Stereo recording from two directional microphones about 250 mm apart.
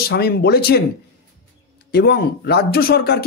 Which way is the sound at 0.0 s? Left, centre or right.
Left.